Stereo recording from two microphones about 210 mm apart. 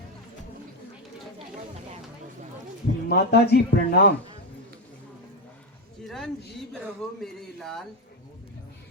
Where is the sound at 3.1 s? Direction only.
50° left (ahead or behind).